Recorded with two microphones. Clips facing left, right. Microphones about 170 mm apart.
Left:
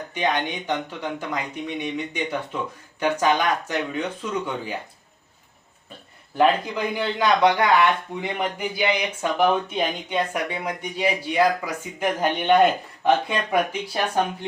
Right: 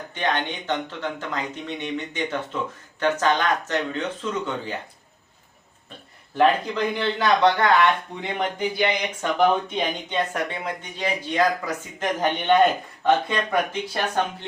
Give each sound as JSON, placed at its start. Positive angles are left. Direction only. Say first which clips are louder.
{"t": 0.1, "sound": "speech", "louder": "left 1 dB", "side_deg": 10}
{"t": 6.3, "sound": "speech", "louder": "even", "side_deg": 10}